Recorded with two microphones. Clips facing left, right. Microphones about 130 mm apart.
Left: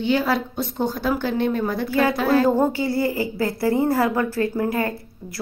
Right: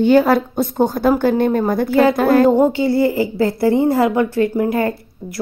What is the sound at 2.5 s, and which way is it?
A woman's voice, 25° right (ahead or behind).